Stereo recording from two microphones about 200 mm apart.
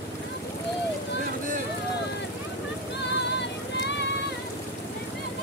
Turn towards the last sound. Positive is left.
turn(degrees=60)  # may be behind; listen again after turning